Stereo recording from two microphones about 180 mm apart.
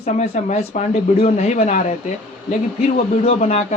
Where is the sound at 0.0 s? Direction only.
40° left (ahead or behind).